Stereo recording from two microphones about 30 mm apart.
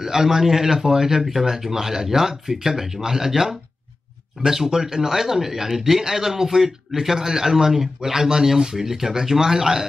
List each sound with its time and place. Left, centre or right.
0.0 s speech: centre
4.6 s speech: centre